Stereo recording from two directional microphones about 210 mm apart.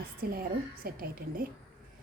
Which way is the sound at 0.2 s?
45° right (ahead or behind).